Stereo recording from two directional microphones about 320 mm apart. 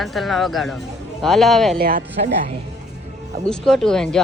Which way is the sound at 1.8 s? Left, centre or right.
Right.